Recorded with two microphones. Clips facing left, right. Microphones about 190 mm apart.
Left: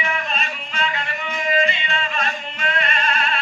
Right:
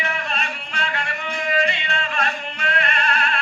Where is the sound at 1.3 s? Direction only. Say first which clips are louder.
Left 2 dB; 65° right (ahead or behind).